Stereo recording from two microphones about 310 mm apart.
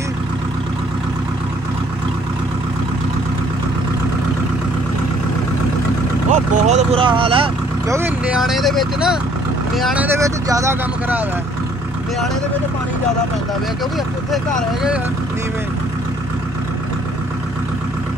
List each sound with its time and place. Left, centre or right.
6.3 s speech: right; by 11.2 s centre
14.3 s speech: centre